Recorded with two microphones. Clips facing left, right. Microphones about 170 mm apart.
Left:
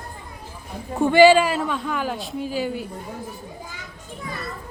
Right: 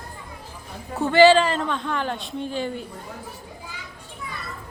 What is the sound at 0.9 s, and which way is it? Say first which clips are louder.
A man's voice: left 1 dB; 15° left (ahead or behind).